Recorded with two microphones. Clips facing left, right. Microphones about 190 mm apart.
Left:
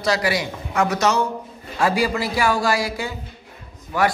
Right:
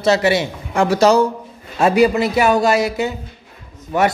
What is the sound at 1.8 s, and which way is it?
A man's voice, 20° right (ahead or behind).